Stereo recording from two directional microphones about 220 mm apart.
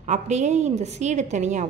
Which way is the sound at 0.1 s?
30° right (ahead or behind).